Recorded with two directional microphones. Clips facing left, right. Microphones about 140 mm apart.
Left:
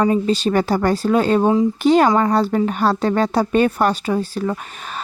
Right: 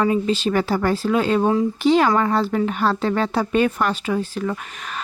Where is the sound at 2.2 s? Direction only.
35° left (ahead or behind).